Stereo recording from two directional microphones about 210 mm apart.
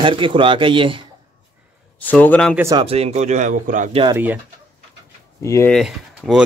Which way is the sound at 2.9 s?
30° right (ahead or behind).